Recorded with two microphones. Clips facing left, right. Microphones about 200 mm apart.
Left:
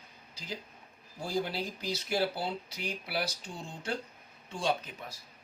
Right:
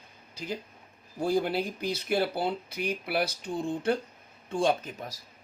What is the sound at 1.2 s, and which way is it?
Speech, 55° right (ahead or behind).